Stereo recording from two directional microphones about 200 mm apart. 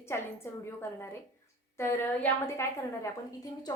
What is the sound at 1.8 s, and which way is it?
Speech, 10° left (ahead or behind).